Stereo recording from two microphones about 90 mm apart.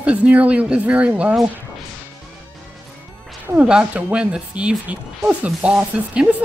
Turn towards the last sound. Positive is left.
turn(degrees=-15)  # may be behind; listen again after turning